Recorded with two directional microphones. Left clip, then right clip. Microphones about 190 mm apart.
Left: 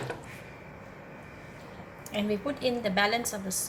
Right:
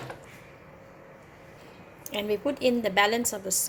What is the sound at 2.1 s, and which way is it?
A woman's voice, 50° right (ahead or behind).